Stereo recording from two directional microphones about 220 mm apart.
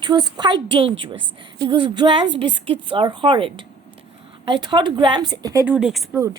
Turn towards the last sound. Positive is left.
turn(degrees=0)  # may be behind; listen again after turning